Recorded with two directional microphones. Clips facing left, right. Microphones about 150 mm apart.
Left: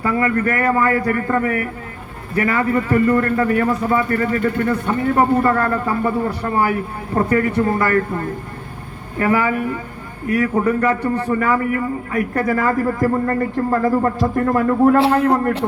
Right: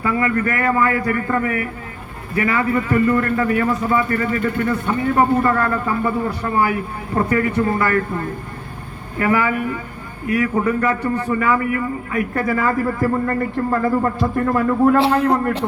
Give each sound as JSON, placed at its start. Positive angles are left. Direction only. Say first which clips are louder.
{"t": 0.0, "sound": "a man's voice", "louder": "left 1 dB", "side_deg": 40}
{"t": 9.1, "sound": "a man's voice", "louder": "left 1 dB", "side_deg": 35}